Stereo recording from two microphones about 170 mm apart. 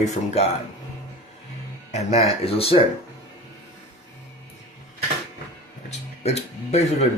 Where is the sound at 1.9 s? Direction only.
40° left (ahead or behind).